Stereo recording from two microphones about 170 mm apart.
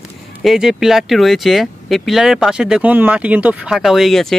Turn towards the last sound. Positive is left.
turn(degrees=0)  # may be behind; listen again after turning